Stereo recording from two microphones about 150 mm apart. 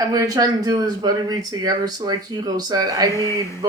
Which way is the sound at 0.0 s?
25° right (ahead or behind).